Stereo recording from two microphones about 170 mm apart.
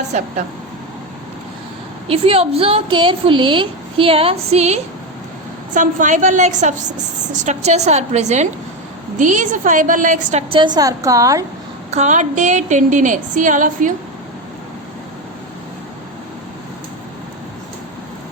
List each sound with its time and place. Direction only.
2.0 s a woman's voice: 35° right (ahead or behind)
10.8 s a woman's voice: 20° right (ahead or behind)
11.9 s a woman's voice: 45° right (ahead or behind)